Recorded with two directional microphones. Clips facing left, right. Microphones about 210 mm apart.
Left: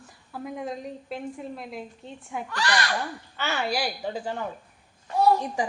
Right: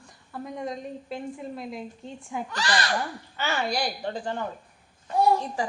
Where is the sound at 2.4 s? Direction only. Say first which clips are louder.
Left 1 dB; 20° right (ahead or behind).